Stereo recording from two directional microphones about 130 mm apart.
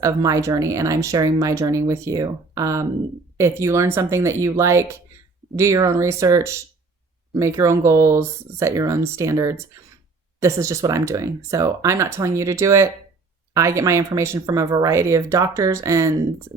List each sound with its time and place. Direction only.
0.0 s speech: 25° right (ahead or behind)